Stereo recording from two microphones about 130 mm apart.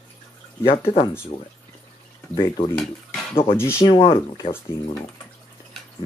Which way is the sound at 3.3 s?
45° left (ahead or behind).